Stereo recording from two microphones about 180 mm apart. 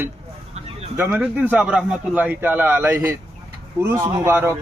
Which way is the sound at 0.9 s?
10° right (ahead or behind).